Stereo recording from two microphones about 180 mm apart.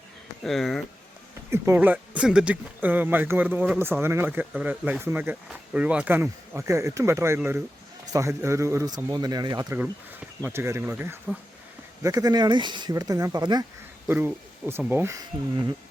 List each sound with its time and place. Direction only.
0.4 s speech: centre (ahead or behind)
1.5 s speech: 15° right (ahead or behind)
9.7 s speech: 10° right (ahead or behind)
14.1 s speech: 10° right (ahead or behind)